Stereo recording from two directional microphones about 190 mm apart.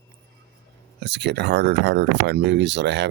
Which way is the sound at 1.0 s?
60° right (ahead or behind).